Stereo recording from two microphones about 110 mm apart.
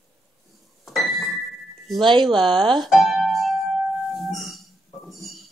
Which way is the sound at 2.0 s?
50° right (ahead or behind).